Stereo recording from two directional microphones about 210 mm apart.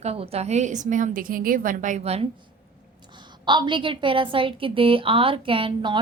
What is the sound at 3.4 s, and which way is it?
A woman's voice, 20° right (ahead or behind).